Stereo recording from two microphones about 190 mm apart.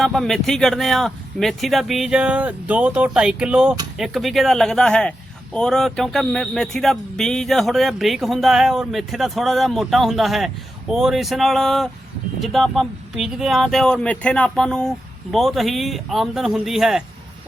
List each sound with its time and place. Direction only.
0.0 s speech: centre (ahead or behind)